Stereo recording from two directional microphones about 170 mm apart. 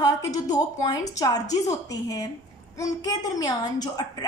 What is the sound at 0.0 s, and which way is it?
A woman's voice, 20° left (ahead or behind).